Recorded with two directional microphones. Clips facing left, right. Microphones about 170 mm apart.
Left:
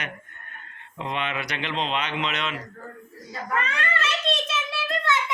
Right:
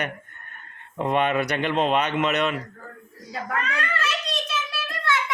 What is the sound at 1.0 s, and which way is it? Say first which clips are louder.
Speech: right 8 dB; 50° right (ahead or behind).